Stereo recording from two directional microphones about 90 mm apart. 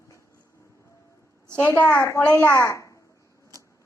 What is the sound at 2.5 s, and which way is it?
Speech, 35° left (ahead or behind).